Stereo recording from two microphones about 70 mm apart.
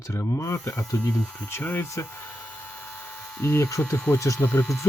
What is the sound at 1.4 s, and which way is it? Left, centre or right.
Speech, left.